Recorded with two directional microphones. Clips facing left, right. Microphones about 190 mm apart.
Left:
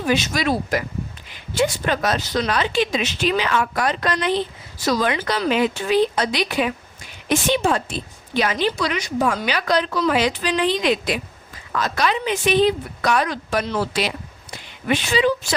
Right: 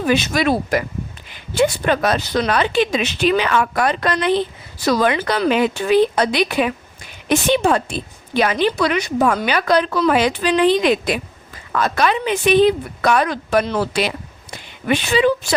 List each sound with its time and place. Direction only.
0.1 s a woman's voice: 60° right (ahead or behind)